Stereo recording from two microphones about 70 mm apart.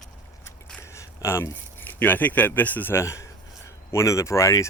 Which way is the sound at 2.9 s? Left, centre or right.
Left.